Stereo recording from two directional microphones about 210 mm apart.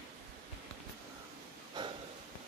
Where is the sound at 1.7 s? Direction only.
20° right (ahead or behind).